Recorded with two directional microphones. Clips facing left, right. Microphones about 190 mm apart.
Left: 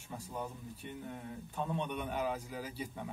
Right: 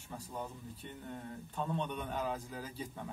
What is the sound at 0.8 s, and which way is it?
A man's voice, 10° left (ahead or behind).